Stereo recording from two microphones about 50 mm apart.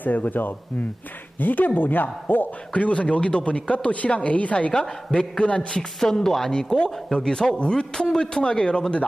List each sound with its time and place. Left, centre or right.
0.0 s speech: left
2.7 s speech: left
5.8 s a man's voice: centre